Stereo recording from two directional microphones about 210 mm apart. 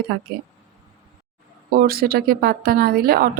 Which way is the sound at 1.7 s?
45° right (ahead or behind).